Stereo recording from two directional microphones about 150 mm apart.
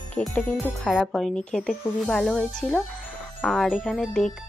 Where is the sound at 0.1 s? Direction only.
5° left (ahead or behind).